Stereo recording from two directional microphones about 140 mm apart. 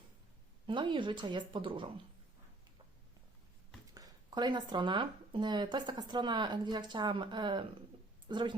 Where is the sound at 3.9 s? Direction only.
30° right (ahead or behind).